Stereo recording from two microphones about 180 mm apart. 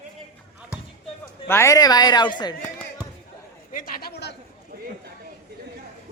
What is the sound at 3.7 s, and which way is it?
Speech, 45° left (ahead or behind).